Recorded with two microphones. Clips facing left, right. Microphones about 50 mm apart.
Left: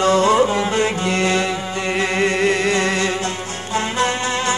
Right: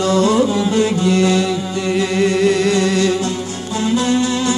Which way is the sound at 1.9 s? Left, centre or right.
Left.